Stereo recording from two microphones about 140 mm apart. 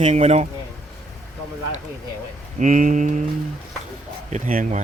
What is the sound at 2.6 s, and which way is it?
Speech, 65° right (ahead or behind).